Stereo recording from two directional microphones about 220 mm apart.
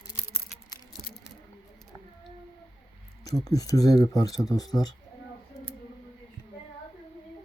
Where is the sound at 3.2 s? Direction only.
15° left (ahead or behind).